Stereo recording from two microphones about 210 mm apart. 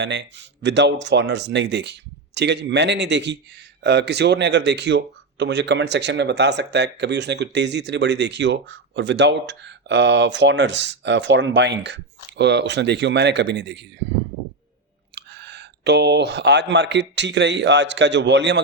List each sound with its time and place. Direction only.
0.0 s speech: 55° right (ahead or behind)
15.1 s speech: 55° right (ahead or behind)